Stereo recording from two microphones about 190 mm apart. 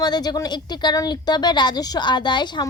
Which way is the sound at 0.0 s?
20° left (ahead or behind).